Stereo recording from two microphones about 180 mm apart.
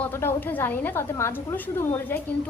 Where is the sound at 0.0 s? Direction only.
15° left (ahead or behind).